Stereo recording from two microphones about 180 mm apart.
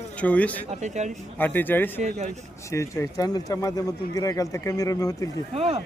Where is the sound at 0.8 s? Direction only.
40° right (ahead or behind).